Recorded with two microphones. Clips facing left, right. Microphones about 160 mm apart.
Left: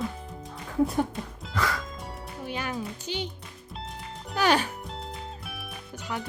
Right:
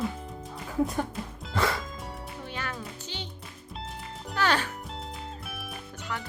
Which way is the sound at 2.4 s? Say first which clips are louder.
Left 6 dB; 15° left (ahead or behind).